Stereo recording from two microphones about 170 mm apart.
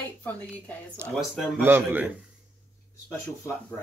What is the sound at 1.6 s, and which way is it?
Speech, 10° right (ahead or behind).